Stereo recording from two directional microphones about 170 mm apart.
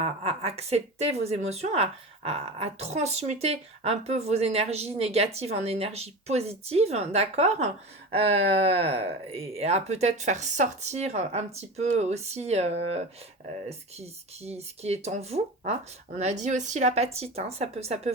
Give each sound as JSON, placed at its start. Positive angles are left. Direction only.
{"t": 0.0, "sound": "speech", "side_deg": -35}